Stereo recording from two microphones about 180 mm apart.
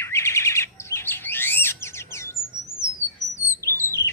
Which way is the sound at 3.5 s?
15° left (ahead or behind).